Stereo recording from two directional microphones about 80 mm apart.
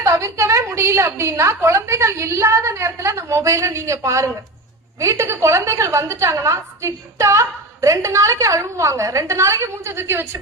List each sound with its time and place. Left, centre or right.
0.0 s a woman's voice: right